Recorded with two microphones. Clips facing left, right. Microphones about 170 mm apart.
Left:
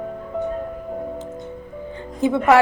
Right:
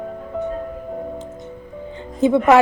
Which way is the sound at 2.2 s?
20° right (ahead or behind).